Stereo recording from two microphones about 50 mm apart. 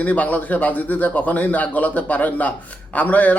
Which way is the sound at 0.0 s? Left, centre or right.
Left.